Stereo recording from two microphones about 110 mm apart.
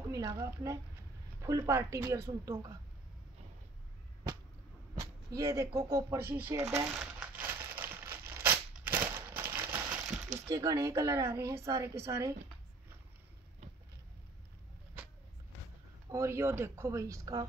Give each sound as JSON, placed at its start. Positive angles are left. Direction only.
{"t": 0.1, "sound": "a sound", "side_deg": -30}
{"t": 1.4, "sound": "a woman's voice", "side_deg": -25}
{"t": 5.3, "sound": "a woman's voice", "side_deg": -25}
{"t": 7.0, "sound": "crumpling", "side_deg": -10}
{"t": 9.8, "sound": "a sound", "side_deg": -5}
{"t": 10.5, "sound": "a woman's voice", "side_deg": -30}
{"t": 16.1, "sound": "a woman's voice", "side_deg": -25}